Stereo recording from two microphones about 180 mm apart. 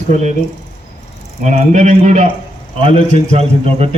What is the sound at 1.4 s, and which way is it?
A man's voice, 40° right (ahead or behind).